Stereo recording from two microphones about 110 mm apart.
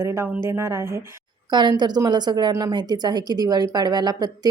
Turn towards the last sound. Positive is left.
turn(degrees=-40)  # may be behind; listen again after turning